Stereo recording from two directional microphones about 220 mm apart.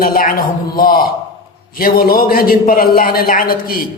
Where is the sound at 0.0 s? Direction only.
40° left (ahead or behind).